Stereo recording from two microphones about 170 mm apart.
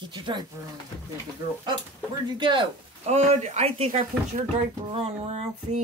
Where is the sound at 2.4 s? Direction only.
30° right (ahead or behind).